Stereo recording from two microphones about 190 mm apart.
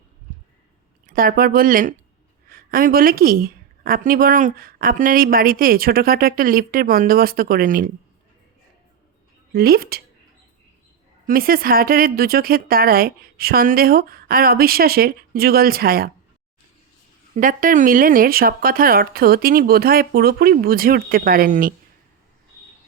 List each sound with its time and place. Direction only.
1.0 s a woman's voice: 50° right (ahead or behind)
9.5 s a woman's voice: 50° right (ahead or behind)
11.3 s a woman's voice: 50° right (ahead or behind)
17.3 s a woman's voice: 45° right (ahead or behind)